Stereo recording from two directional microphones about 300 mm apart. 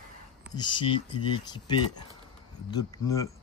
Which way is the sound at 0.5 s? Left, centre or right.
Centre.